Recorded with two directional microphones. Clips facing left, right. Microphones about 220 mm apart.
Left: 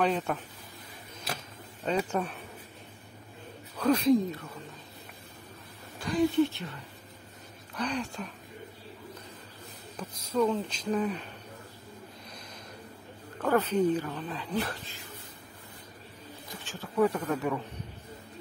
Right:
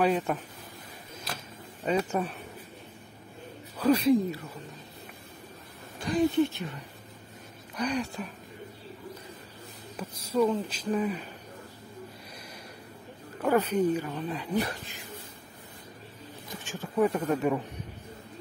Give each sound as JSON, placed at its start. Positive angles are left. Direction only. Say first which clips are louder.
{"t": 0.0, "sound": "speech", "louder": "right 2 dB", "side_deg": -5}
{"t": 1.9, "sound": "speech", "louder": "right 2 dB", "side_deg": -5}
{"t": 3.7, "sound": "speech", "louder": "right 1 dB", "side_deg": -5}
{"t": 6.1, "sound": "speech", "louder": "right 2 dB", "side_deg": -20}
{"t": 7.7, "sound": "speech", "louder": "right 3 dB", "side_deg": -10}
{"t": 10.0, "sound": "speech", "louder": "right 2 dB", "side_deg": -10}
{"t": 13.4, "sound": "speech", "louder": "right 1 dB", "side_deg": -10}
{"t": 16.6, "sound": "speech", "louder": "even", "side_deg": -15}